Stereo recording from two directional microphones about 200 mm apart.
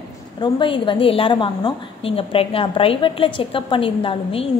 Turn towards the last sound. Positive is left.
turn(degrees=25)  # may be behind; listen again after turning